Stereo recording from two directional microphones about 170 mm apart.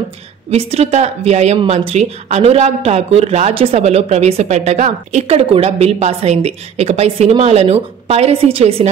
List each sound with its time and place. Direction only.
0.5 s speech: 35° right (ahead or behind)